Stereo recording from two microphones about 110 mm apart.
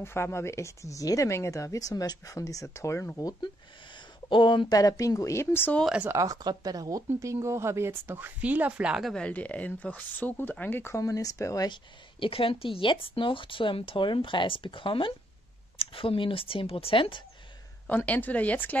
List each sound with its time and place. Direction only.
0.0 s speech: 20° left (ahead or behind)
3.9 s speech: 45° left (ahead or behind); by 5.8 s 20° left (ahead or behind)
6.0 s speech: 30° right (ahead or behind); by 9.1 s 10° right (ahead or behind)
9.1 s speech: 10° left (ahead or behind); by 11.8 s 35° left (ahead or behind)
12.2 s speech: 55° left (ahead or behind)
17.8 s speech: 15° left (ahead or behind)